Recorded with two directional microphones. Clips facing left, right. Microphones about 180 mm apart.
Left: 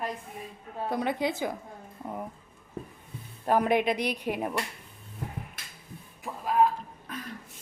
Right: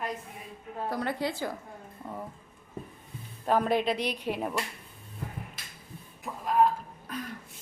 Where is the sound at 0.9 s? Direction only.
20° left (ahead or behind).